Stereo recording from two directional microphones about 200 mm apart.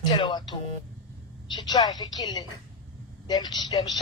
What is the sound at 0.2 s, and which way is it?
Speech, 20° left (ahead or behind).